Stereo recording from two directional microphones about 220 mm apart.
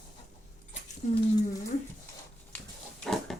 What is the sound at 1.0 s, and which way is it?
Speech, 35° left (ahead or behind).